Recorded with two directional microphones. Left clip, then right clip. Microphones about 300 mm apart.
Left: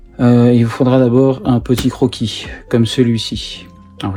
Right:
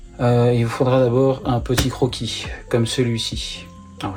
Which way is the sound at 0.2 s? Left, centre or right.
Left.